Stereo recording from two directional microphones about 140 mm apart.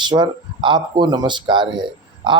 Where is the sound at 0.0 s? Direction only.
35° right (ahead or behind).